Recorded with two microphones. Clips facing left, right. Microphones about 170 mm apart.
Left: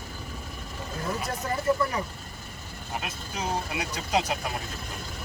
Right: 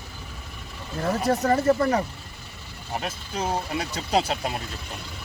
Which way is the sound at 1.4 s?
50° right (ahead or behind).